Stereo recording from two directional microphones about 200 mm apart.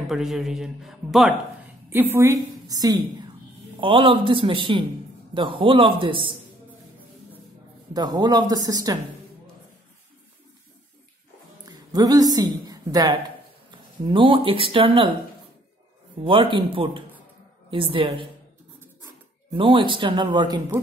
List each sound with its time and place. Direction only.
0.1 s a woman's voice: centre (ahead or behind); by 6.3 s 25° right (ahead or behind)
7.9 s speech: 20° right (ahead or behind)
11.6 s a woman's voice: 20° right (ahead or behind)
16.3 s speech: 25° right (ahead or behind)
19.5 s speech: 25° right (ahead or behind)